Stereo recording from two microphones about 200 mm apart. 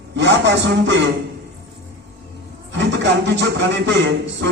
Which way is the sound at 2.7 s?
65° right (ahead or behind).